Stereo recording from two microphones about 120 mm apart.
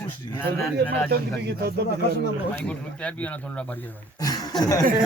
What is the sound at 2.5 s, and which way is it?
Speech, 10° left (ahead or behind).